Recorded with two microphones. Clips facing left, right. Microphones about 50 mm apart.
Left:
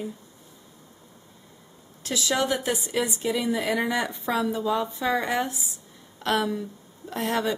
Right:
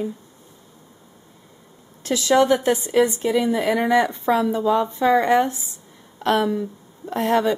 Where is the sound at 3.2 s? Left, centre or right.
Centre.